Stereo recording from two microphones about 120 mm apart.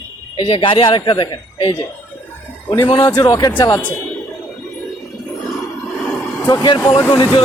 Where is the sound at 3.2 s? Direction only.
35° left (ahead or behind).